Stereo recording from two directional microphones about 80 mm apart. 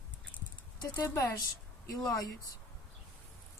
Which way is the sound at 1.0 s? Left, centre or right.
Left.